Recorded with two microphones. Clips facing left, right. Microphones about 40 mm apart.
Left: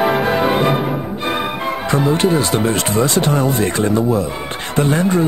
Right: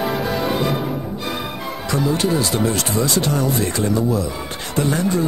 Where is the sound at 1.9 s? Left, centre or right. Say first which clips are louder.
Left 4 dB; left.